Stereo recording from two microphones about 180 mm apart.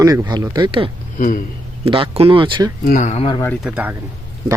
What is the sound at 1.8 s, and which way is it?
Speech, 30° right (ahead or behind).